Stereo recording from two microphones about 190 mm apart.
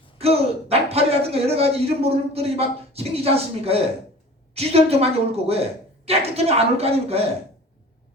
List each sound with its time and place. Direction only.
0.2 s a woman's voice: 30° right (ahead or behind)